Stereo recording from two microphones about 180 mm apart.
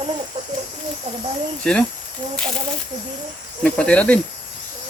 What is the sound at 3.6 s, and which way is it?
Speech, 5° left (ahead or behind).